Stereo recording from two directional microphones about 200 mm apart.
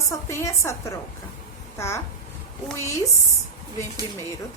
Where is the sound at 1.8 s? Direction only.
15° left (ahead or behind).